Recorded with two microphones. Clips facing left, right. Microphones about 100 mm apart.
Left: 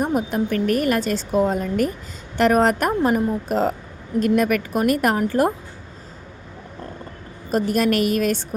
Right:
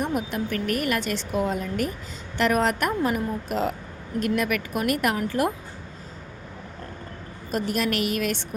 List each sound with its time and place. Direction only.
0.0 s a woman's voice: 40° left (ahead or behind)
7.5 s a woman's voice: 40° left (ahead or behind)